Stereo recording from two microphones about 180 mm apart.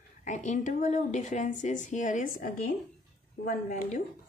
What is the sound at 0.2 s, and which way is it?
A woman's voice, 45° left (ahead or behind).